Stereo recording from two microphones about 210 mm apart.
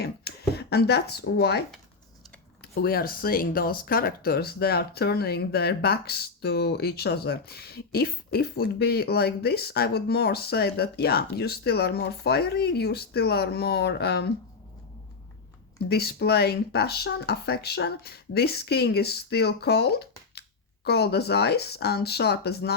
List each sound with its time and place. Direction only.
0.0 s speech: 50° left (ahead or behind)
15.9 s speech: 50° left (ahead or behind)